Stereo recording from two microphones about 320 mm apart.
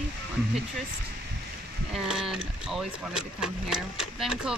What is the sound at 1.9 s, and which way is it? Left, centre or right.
Speech, centre.